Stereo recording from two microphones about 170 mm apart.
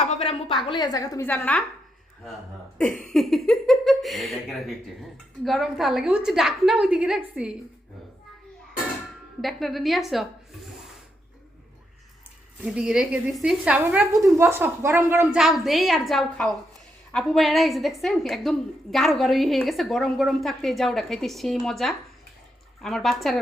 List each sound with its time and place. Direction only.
0.0 s a sound: 40° left (ahead or behind)
0.6 s a woman's voice: 25° left (ahead or behind); by 1.6 s 10° left (ahead or behind)
3.0 s a woman's voice: centre (ahead or behind)
9.4 s a woman's voice: centre (ahead or behind)
12.7 s a woman's voice: 5° right (ahead or behind)
15.4 s a woman's voice: centre (ahead or behind)